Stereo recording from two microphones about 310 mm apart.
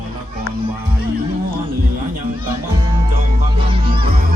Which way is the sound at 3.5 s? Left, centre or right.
Centre.